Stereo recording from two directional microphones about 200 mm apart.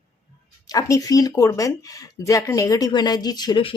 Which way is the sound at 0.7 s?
15° left (ahead or behind).